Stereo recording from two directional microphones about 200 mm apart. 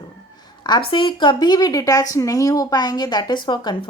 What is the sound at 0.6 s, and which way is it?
A woman's voice, 25° left (ahead or behind).